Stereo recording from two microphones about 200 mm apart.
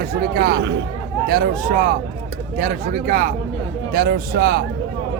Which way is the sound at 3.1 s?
45° right (ahead or behind).